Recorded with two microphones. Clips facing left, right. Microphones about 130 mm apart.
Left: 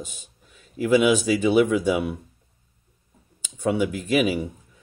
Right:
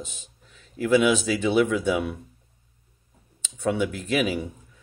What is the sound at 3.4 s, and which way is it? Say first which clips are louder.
Speech: left 2 dB; 10° left (ahead or behind).